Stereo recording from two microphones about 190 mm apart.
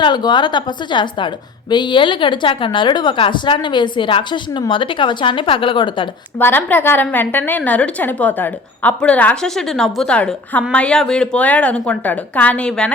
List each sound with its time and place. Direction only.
0.0 s a woman's voice: 25° left (ahead or behind)
6.4 s a woman's voice: 10° left (ahead or behind)